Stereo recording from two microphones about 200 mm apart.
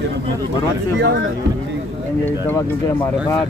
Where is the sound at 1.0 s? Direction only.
65° right (ahead or behind).